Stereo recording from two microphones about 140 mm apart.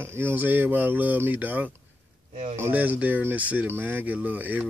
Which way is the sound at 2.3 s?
55° right (ahead or behind).